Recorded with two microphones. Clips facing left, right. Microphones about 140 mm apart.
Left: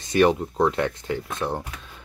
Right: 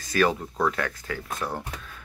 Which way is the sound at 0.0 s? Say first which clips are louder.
Left 5 dB; 25° left (ahead or behind).